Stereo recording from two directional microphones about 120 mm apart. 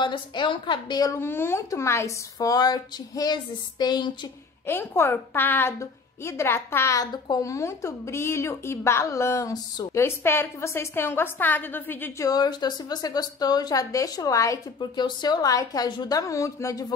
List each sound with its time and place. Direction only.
0.0 s speech: 40° left (ahead or behind)
1.1 s speech: 20° left (ahead or behind); by 4.3 s 35° left (ahead or behind)
4.6 s a woman's voice: 20° left (ahead or behind)
10.0 s a woman's voice: 20° left (ahead or behind)
12.3 s speech: 35° left (ahead or behind)